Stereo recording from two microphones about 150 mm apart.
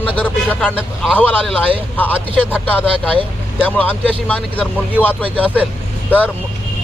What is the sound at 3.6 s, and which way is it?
Speech, 10° left (ahead or behind).